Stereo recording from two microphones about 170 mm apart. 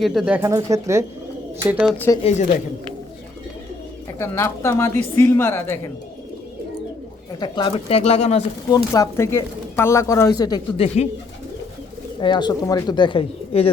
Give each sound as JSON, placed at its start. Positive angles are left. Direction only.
{"t": 0.0, "sound": "speech", "side_deg": 0}
{"t": 0.3, "sound": "speech", "side_deg": -15}
{"t": 1.6, "sound": "speech", "side_deg": -5}
{"t": 4.2, "sound": "speech", "side_deg": 15}
{"t": 7.3, "sound": "speech", "side_deg": 25}
{"t": 8.7, "sound": "speech", "side_deg": 20}
{"t": 10.8, "sound": "speech", "side_deg": 40}
{"t": 12.2, "sound": "speech", "side_deg": 25}